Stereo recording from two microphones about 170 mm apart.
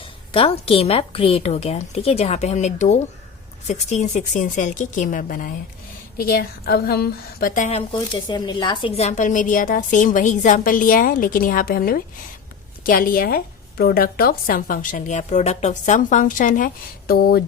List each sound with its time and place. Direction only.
0.3 s a woman's voice: 35° left (ahead or behind); by 5.5 s 50° left (ahead or behind)
6.1 s a woman's voice: 60° left (ahead or behind); by 7.9 s 40° left (ahead or behind)
7.9 s a woman's voice: 25° left (ahead or behind); by 17.4 s 65° left (ahead or behind)